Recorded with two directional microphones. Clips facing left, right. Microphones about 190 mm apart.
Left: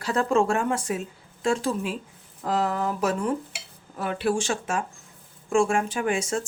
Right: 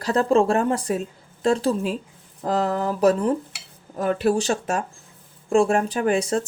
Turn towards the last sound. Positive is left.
turn(degrees=-35)  # may be behind; listen again after turning